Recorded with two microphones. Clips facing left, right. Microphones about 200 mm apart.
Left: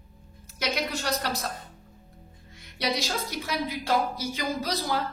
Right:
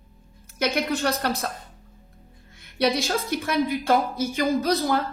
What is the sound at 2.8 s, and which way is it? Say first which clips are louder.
Speech: right 6 dB; 55° right (ahead or behind).